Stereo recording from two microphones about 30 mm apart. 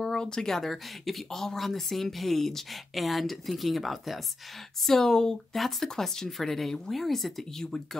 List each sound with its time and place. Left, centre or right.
0.0 s a sound: left
0.5 s speech: centre
4.8 s speech: centre
5.5 s speech: centre